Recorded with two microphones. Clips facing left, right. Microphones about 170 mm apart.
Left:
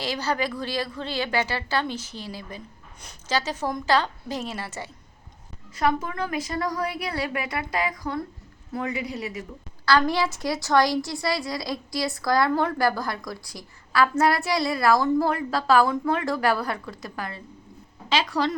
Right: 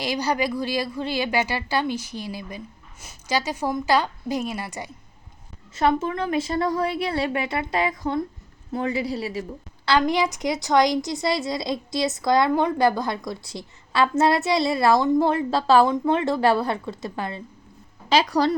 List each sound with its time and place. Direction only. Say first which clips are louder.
0.0 s a woman's voice: right 3 dB; 15° right (ahead or behind)
5.7 s a woman's voice: right 3 dB; 25° right (ahead or behind)
9.8 s a woman's voice: right 1 dB; 20° right (ahead or behind)
18.1 s a woman's voice: right 4 dB; 40° right (ahead or behind)